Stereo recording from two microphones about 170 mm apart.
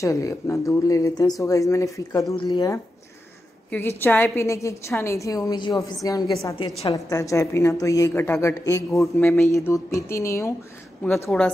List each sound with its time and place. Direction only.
0.0 s speech: 20° left (ahead or behind)
3.7 s a woman's voice: 10° left (ahead or behind)
11.2 s a woman's voice: 5° left (ahead or behind)